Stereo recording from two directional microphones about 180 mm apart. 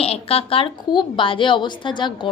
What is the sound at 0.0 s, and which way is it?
A woman's voice, 35° left (ahead or behind).